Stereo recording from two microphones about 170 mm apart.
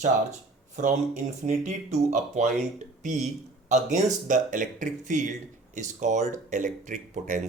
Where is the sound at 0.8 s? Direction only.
45° right (ahead or behind).